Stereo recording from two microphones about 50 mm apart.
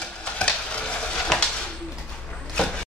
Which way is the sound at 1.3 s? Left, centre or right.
Centre.